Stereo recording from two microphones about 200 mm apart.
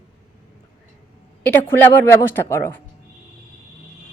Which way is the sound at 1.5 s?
10° left (ahead or behind).